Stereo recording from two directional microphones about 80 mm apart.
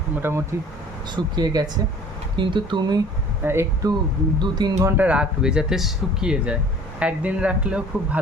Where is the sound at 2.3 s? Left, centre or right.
Right.